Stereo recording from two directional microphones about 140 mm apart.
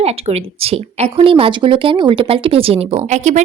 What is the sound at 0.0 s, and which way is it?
Speech, 45° right (ahead or behind).